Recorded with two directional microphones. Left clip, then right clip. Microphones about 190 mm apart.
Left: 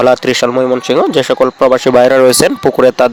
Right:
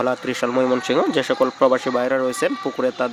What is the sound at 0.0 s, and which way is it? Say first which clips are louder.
Speech: left 12 dB; 45° left (ahead or behind).